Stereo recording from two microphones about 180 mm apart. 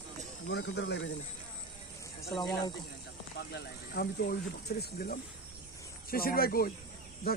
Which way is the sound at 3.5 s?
60° left (ahead or behind).